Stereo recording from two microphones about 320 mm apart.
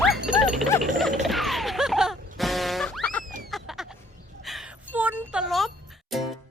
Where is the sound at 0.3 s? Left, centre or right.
Centre.